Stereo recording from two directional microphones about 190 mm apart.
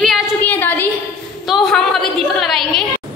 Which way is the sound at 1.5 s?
Centre (ahead or behind).